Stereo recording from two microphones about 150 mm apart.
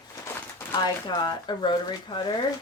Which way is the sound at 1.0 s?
30° left (ahead or behind).